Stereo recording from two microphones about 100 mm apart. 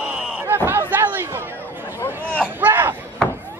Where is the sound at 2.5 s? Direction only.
20° right (ahead or behind).